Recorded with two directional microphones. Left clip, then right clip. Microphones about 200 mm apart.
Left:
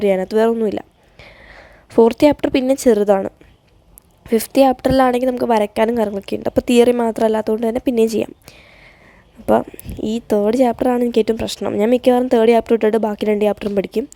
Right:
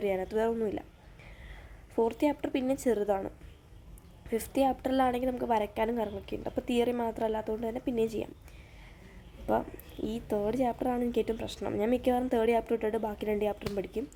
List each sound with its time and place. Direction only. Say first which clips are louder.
0.0 s a woman's voice: left 15 dB; 35° left (ahead or behind)